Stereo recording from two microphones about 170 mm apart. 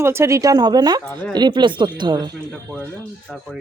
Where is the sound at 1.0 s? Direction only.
10° left (ahead or behind).